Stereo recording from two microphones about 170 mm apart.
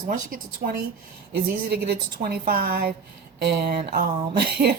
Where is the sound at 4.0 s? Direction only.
65° right (ahead or behind).